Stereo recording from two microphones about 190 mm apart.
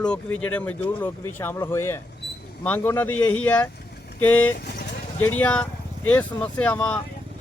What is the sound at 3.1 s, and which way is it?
Speech, 90° left.